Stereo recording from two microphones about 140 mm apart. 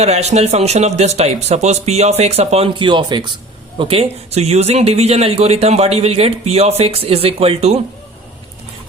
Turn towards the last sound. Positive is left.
turn(degrees=-45)  # may be behind; listen again after turning